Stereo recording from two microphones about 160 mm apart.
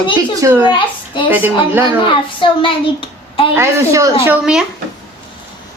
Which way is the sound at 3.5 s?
20° right (ahead or behind).